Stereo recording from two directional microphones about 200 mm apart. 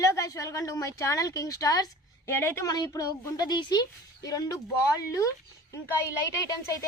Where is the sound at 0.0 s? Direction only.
15° left (ahead or behind).